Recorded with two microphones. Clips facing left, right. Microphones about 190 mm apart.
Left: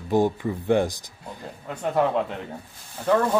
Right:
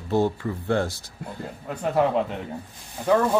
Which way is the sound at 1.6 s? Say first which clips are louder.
Right 1 dB; centre (ahead or behind).